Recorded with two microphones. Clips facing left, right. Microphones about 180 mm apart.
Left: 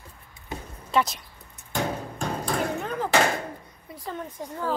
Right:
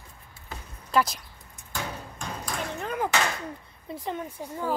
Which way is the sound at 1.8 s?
35° left (ahead or behind).